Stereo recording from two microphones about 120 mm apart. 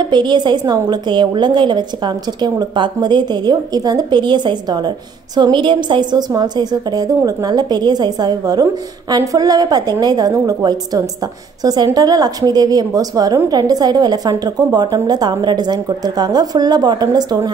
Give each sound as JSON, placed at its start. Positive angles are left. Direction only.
{"t": 0.0, "sound": "a woman's voice", "side_deg": -40}